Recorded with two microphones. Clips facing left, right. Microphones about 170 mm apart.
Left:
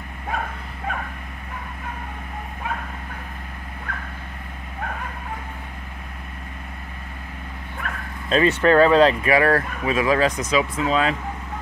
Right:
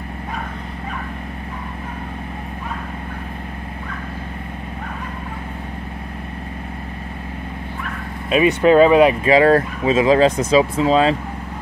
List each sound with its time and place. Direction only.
8.3 s speech: 10° right (ahead or behind); by 11.1 s 30° right (ahead or behind)